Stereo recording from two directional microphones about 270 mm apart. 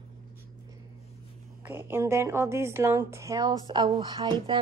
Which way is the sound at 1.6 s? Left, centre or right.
Centre.